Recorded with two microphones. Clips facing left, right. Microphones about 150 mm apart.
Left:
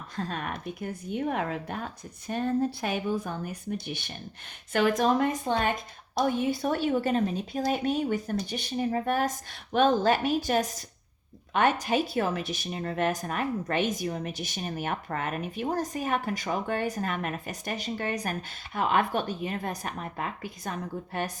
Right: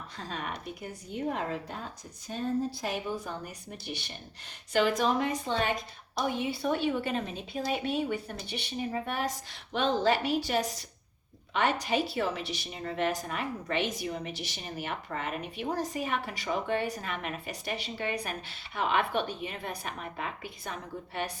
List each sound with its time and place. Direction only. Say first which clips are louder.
0.2 s speech: left 5 dB; 55° left (ahead or behind)